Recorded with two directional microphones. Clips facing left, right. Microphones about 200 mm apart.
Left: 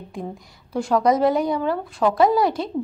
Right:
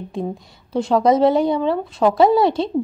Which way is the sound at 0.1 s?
25° right (ahead or behind).